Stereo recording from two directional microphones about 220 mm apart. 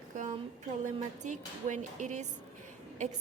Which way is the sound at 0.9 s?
35° right (ahead or behind).